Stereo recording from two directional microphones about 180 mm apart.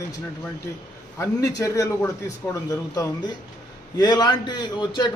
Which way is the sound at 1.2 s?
20° left (ahead or behind).